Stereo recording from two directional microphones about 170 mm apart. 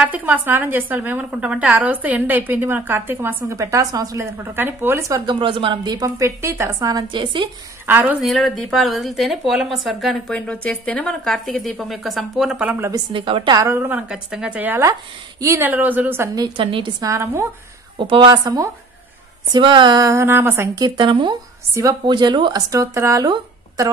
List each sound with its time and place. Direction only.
0.0 s a woman's voice: 10° right (ahead or behind); by 7.4 s 25° right (ahead or behind)
7.8 s a woman's voice: 10° right (ahead or behind)
12.9 s a woman's voice: 30° right (ahead or behind); by 16.4 s 15° right (ahead or behind)
16.4 s speech: 30° right (ahead or behind)
17.9 s speech: 30° right (ahead or behind)